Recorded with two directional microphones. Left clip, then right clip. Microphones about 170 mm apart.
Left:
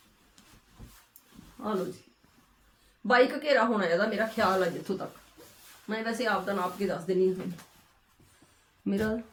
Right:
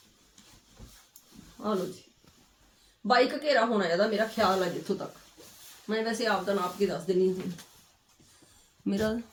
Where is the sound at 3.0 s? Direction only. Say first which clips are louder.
Left 1 dB; 10° left (ahead or behind).